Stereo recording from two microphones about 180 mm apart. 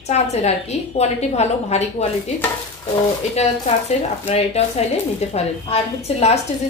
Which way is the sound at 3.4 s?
35° left (ahead or behind).